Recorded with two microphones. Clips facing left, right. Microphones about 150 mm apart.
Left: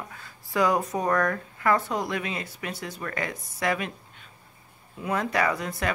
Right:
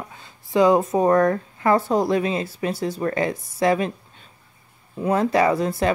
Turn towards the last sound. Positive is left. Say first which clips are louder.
# right 7 dB
turn(degrees=-30)  # may be behind; listen again after turning